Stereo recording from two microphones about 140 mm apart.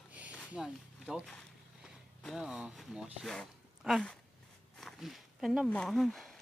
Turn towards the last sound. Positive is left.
turn(degrees=5)  # may be behind; listen again after turning